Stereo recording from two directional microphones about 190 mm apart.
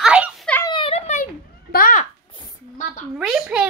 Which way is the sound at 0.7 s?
30° left (ahead or behind).